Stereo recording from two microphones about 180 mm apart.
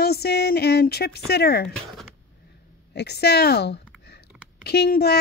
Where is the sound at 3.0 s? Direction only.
65° left (ahead or behind).